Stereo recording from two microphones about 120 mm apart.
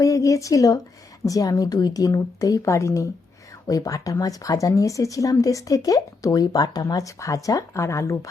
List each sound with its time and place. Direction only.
0.0 s speech: 25° left (ahead or behind)